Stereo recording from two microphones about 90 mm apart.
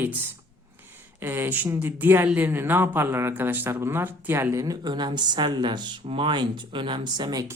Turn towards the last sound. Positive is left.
turn(degrees=-50)  # may be behind; listen again after turning